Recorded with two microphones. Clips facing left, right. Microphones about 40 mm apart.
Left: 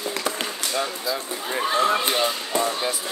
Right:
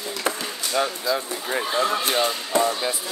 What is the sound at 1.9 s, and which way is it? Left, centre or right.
Speech, left.